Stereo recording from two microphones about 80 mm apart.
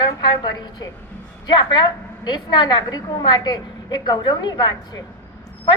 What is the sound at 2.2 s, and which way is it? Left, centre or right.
A woman's voice, left.